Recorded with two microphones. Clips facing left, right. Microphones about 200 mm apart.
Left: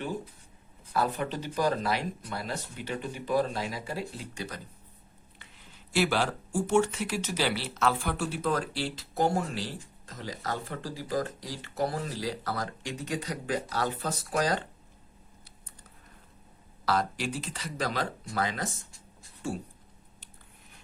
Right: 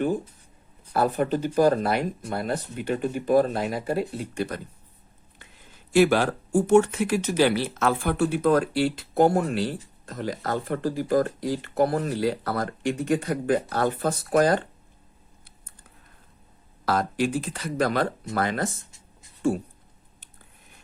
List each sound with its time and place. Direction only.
0.9 s speech: 50° right (ahead or behind)
5.9 s speech: 50° right (ahead or behind)
16.8 s speech: 50° right (ahead or behind)